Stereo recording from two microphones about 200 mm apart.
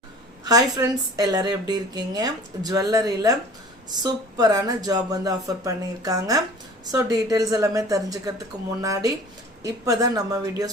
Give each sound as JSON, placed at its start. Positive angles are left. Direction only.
{"t": 0.4, "sound": "a woman's voice", "side_deg": -20}